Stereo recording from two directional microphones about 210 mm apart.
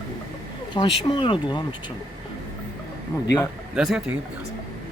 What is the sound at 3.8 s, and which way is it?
Speech, centre (ahead or behind).